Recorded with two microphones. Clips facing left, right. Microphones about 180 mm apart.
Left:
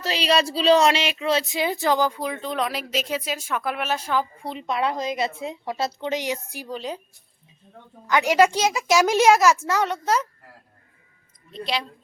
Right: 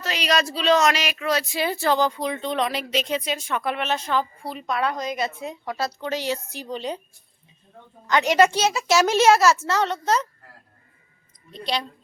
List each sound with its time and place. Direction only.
0.0 s speech: 30° left (ahead or behind); by 4.3 s 10° left (ahead or behind)
4.4 s a woman's voice: 25° left (ahead or behind); by 7.0 s centre (ahead or behind)
8.0 s speech: 10° left (ahead or behind)
11.5 s speech: centre (ahead or behind)